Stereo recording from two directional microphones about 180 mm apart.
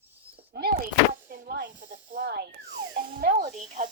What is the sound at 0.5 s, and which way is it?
Door, 60° right (ahead or behind).